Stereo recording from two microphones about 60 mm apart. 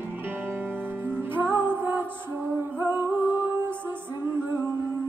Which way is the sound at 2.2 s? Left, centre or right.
Right.